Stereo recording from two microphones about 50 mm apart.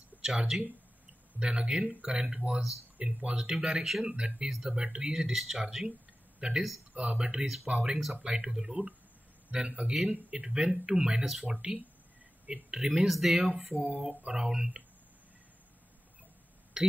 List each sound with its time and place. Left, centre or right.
0.2 s a man's voice: centre
3.3 s a man's voice: centre
4.5 s speech: centre
4.7 s speech: centre
6.4 s a man's voice: centre
13.7 s a sound: left
14.2 s speech: centre
16.8 s a sound: centre